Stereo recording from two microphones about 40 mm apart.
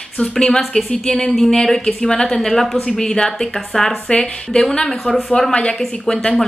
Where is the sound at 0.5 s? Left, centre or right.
Centre.